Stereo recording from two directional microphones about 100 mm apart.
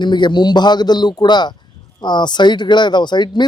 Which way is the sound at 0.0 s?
50° left (ahead or behind).